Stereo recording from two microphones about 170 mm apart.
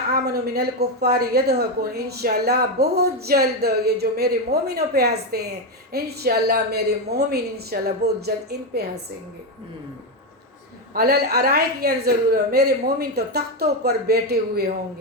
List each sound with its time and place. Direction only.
0.1 s a woman's voice: 65° right (ahead or behind)
10.9 s a woman's voice: 65° right (ahead or behind)